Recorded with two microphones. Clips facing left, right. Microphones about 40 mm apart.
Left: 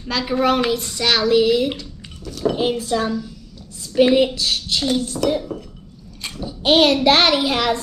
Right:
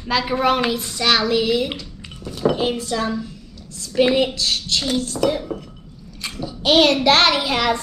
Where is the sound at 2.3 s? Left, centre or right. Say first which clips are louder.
Right 2 dB; right.